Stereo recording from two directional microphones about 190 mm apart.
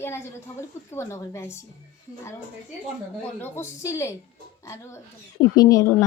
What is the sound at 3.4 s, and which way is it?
Speech, 15° left (ahead or behind).